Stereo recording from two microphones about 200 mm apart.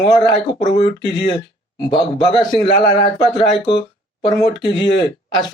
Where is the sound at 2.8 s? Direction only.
25° left (ahead or behind).